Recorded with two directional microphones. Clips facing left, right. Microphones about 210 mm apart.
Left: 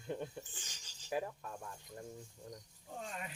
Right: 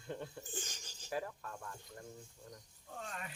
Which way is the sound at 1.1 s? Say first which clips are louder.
Left 2 dB; 15° left (ahead or behind).